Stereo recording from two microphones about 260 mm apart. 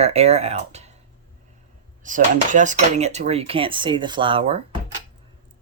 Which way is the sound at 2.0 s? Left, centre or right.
Right.